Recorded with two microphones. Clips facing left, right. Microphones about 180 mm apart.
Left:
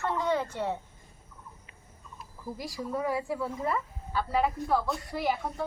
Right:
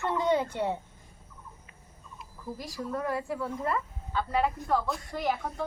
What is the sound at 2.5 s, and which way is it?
A woman's voice, 10° left (ahead or behind).